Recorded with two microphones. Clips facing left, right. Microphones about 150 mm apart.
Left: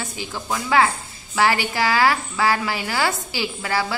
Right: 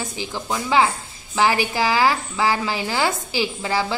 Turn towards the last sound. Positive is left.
turn(degrees=-20)  # may be behind; listen again after turning